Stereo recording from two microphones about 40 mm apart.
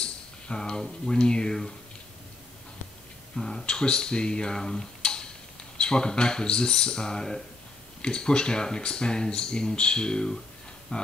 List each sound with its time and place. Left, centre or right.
0.0 s speech: left
3.3 s speech: centre
3.6 s speech: left
10.9 s speech: left